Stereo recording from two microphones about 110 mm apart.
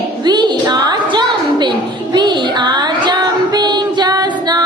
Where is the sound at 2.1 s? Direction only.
45° right (ahead or behind).